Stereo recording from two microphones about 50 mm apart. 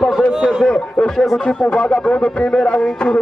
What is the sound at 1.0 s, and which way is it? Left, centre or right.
Music, centre.